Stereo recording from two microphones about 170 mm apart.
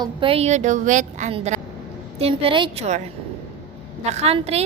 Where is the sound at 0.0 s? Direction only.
30° right (ahead or behind).